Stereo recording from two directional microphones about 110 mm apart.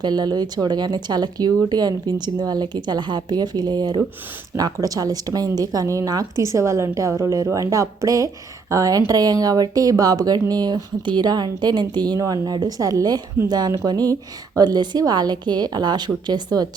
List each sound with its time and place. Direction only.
0.0 s speech: 40° right (ahead or behind)